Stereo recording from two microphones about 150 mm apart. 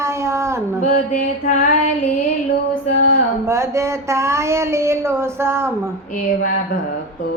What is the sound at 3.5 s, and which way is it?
Speech, 20° right (ahead or behind).